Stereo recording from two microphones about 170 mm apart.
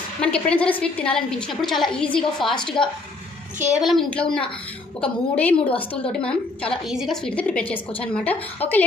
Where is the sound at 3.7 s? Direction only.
Centre (ahead or behind).